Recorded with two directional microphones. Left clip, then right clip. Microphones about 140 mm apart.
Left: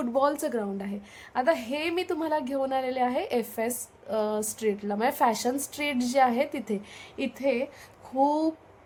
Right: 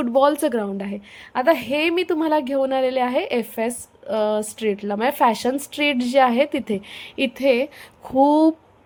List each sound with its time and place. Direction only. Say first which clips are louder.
0.0 s a woman's voice: right 8 dB; 30° right (ahead or behind)